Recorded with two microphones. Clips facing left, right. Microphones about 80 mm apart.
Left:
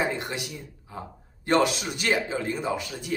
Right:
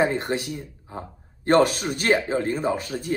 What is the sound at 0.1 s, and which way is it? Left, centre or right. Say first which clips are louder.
Speech: right 6 dB; right.